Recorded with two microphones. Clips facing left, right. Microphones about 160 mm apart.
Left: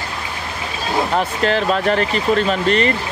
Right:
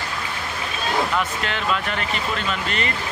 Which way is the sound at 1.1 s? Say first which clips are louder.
Left 7 dB; 40° left (ahead or behind).